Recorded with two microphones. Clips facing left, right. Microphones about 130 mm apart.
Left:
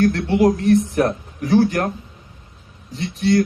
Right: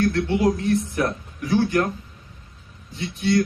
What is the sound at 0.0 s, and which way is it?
A man's voice, 35° left (ahead or behind).